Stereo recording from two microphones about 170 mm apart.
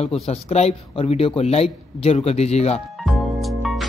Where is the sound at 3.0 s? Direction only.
Centre (ahead or behind).